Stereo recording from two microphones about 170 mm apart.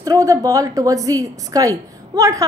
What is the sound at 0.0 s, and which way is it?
A woman's voice, 20° right (ahead or behind).